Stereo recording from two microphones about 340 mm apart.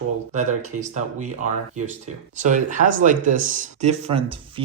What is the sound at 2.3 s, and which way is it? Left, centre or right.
Speech, right.